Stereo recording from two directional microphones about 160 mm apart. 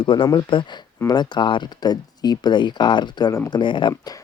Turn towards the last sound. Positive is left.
turn(degrees=30)  # may be behind; listen again after turning